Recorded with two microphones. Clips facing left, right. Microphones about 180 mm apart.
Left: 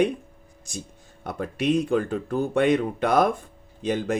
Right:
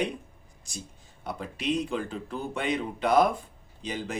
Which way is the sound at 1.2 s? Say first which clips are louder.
Left 6 dB; 55° left (ahead or behind).